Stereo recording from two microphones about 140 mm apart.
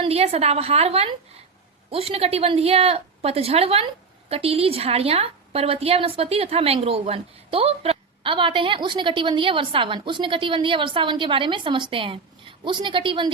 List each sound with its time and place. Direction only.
0.0 s a woman's voice: 45° right (ahead or behind)